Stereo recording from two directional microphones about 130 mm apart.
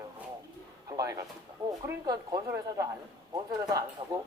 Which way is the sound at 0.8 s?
25° right (ahead or behind).